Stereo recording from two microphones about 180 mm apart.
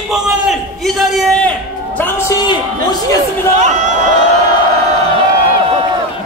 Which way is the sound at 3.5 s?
40° right (ahead or behind).